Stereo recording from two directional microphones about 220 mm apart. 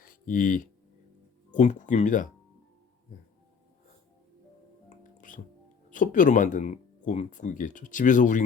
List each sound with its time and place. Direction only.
0.0 s a sound: 35° left (ahead or behind)
1.5 s speech: 35° left (ahead or behind)
5.1 s music: 35° left (ahead or behind)
5.9 s speech: 35° left (ahead or behind)